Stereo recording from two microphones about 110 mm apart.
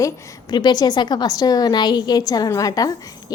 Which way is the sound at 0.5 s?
40° left (ahead or behind).